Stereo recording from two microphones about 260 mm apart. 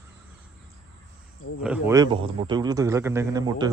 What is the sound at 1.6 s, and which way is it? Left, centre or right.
A man's voice, centre.